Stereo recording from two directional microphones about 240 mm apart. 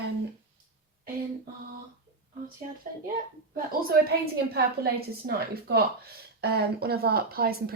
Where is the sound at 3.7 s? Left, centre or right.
Right.